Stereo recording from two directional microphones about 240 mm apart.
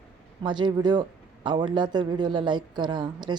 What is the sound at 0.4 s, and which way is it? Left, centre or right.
Speech, centre.